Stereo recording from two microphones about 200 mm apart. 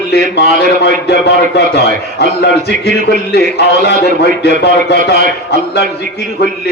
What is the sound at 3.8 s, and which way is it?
Speech, 55° left (ahead or behind).